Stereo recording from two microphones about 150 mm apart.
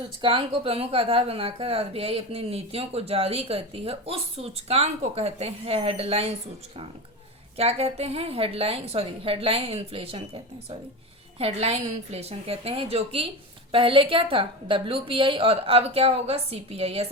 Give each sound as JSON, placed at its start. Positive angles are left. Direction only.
{"t": 0.2, "sound": "a woman's voice", "side_deg": -35}
{"t": 7.5, "sound": "a woman's voice", "side_deg": -40}